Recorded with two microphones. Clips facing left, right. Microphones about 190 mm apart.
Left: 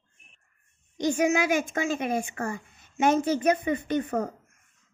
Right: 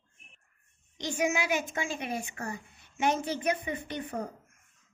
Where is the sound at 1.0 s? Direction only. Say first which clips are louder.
Left 6 dB; 45° left (ahead or behind).